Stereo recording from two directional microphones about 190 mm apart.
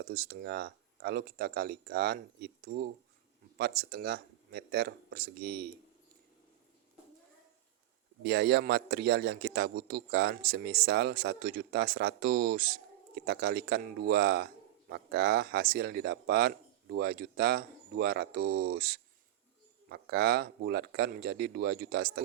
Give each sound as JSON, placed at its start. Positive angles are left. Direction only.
{"t": 0.0, "sound": "a man's voice", "side_deg": -50}
{"t": 8.2, "sound": "a man's voice", "side_deg": -60}